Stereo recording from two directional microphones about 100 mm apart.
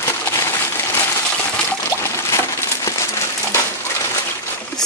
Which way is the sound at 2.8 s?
25° left (ahead or behind).